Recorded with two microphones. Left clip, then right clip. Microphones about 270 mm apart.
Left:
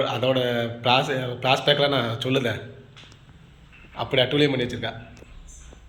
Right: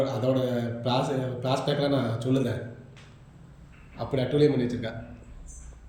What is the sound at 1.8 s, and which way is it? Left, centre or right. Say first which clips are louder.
Speech: left 4 dB; centre.